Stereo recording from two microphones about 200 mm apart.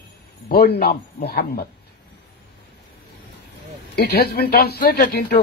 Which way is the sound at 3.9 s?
50° left (ahead or behind).